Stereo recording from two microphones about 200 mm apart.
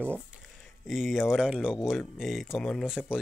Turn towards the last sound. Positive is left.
turn(degrees=-5)  # may be behind; listen again after turning